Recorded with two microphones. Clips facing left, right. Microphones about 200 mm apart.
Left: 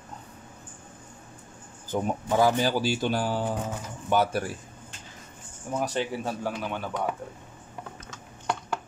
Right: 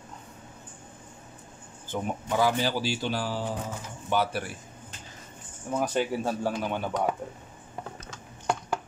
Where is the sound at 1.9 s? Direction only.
35° left (ahead or behind).